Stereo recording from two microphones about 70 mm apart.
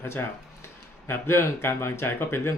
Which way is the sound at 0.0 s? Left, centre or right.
Left.